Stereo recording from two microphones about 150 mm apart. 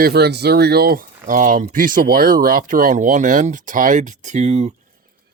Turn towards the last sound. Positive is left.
turn(degrees=-50)  # may be behind; listen again after turning